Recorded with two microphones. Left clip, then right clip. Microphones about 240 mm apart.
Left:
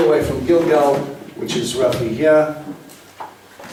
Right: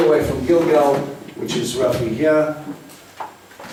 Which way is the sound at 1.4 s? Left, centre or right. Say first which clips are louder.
Left 2 dB; centre.